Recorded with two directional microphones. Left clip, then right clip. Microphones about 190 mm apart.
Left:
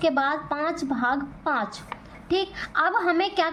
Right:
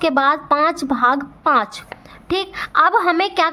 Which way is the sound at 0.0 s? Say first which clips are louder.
Right 7 dB; 40° right (ahead or behind).